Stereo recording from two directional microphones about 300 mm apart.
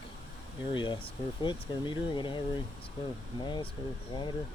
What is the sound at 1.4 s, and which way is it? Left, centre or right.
Speech, centre.